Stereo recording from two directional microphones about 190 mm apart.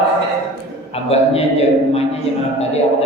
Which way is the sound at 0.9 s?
30° left (ahead or behind).